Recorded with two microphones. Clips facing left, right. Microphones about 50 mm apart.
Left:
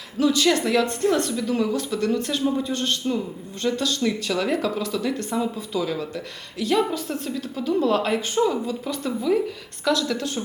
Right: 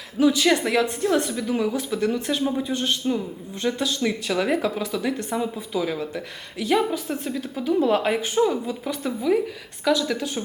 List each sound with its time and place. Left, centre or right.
0.2 s speech: centre